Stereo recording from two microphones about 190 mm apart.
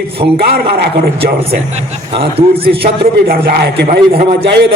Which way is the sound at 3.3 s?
55° right (ahead or behind).